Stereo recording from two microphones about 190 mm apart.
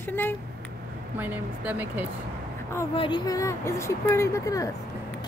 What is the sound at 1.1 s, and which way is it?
Speech, 10° right (ahead or behind).